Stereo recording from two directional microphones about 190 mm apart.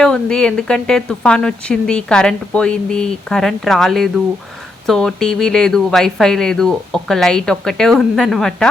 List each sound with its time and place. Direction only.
0.0 s speech: 5° left (ahead or behind)